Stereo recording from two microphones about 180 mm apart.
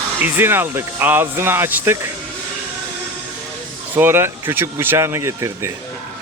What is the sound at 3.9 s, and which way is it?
Speech, 10° right (ahead or behind).